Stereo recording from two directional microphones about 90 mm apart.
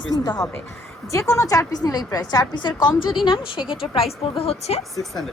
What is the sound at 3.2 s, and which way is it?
Speech, 75° left (ahead or behind).